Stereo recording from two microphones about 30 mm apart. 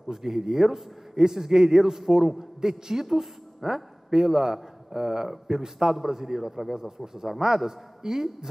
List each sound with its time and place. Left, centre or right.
0.1 s a man's voice: centre